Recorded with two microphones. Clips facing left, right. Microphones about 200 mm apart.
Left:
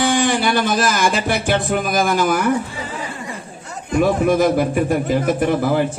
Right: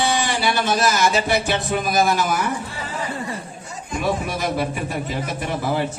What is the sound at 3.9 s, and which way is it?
Speech, 50° left (ahead or behind).